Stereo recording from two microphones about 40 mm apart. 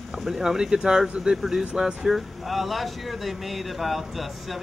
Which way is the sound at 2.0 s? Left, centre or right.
Centre.